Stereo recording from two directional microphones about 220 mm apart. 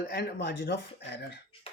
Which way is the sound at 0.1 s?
45° left (ahead or behind).